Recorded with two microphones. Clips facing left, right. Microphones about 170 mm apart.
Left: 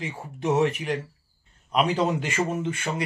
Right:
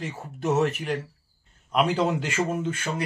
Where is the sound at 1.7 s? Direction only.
5° right (ahead or behind).